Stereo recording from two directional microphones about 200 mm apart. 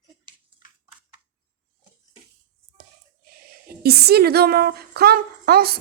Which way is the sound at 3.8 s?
50° right (ahead or behind).